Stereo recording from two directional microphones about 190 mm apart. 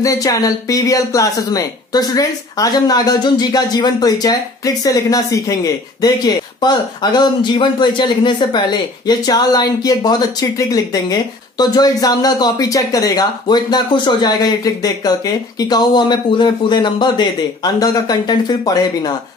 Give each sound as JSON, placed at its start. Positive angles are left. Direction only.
{"t": 0.0, "sound": "speech", "side_deg": 15}